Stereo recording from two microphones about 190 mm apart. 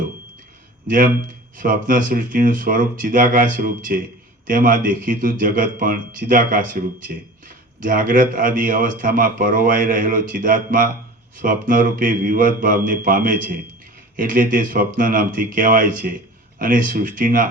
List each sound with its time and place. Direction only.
0.9 s speech: 45° right (ahead or behind)